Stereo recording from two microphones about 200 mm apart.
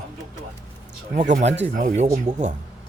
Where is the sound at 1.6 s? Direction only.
40° right (ahead or behind).